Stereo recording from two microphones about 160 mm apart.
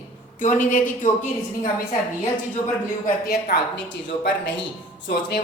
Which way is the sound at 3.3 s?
85° left.